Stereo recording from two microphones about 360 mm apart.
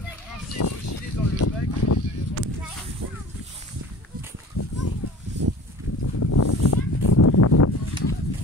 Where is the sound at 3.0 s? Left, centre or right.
Right.